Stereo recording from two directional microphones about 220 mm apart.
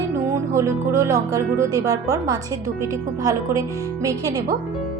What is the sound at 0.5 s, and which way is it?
A woman's voice, 15° right (ahead or behind).